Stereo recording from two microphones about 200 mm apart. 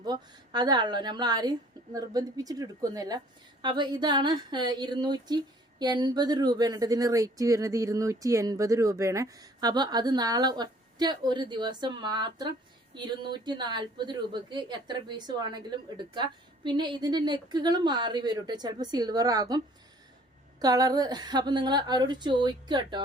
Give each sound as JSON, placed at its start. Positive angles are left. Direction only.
{"t": 0.0, "sound": "speech", "side_deg": -20}